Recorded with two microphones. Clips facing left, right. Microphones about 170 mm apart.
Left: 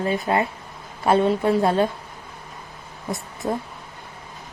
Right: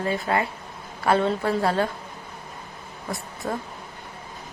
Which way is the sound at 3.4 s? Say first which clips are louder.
Left 4 dB; 25° left (ahead or behind).